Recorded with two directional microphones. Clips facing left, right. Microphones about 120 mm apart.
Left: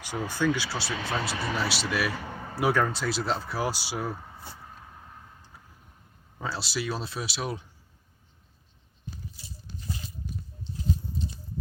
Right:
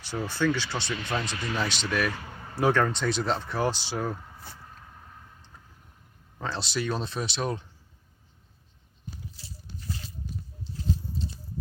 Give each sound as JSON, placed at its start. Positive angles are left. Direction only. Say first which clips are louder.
{"t": 0.0, "sound": "speech", "louder": "even", "side_deg": 15}
{"t": 6.4, "sound": "speech", "louder": "right 1 dB", "side_deg": 5}
{"t": 9.8, "sound": "a sound", "louder": "left 1 dB", "side_deg": 15}